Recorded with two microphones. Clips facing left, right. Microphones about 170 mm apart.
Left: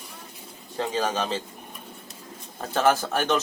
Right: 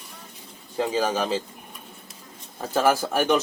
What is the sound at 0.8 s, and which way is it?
Speech, 10° right (ahead or behind).